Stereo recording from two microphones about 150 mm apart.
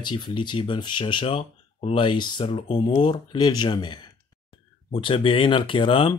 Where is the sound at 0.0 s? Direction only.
30° left (ahead or behind).